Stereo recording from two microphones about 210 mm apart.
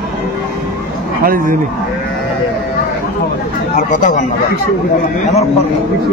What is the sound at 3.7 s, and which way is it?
Speech, 40° left (ahead or behind).